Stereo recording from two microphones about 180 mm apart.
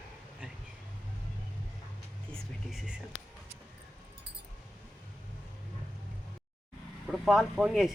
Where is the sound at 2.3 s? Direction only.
Centre (ahead or behind).